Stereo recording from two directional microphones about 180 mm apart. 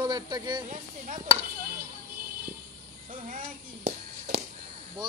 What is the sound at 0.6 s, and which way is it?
Speech, 45° right (ahead or behind).